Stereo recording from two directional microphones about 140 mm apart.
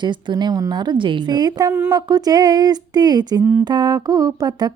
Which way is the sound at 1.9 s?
30° right (ahead or behind).